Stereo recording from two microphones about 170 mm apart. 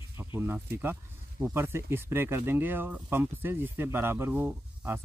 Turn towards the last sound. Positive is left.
turn(degrees=-10)  # may be behind; listen again after turning